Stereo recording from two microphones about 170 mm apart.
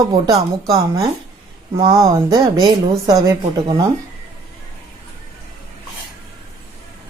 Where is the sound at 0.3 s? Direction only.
20° right (ahead or behind).